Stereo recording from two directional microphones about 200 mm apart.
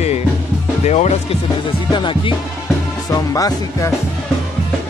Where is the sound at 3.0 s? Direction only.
20° left (ahead or behind).